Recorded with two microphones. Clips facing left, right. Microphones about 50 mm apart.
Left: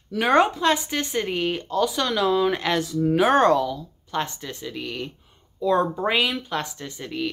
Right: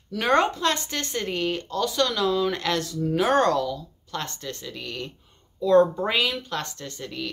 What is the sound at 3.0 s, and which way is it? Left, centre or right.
Speech, left.